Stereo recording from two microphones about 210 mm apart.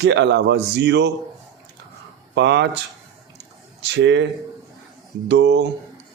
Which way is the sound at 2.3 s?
55° right (ahead or behind).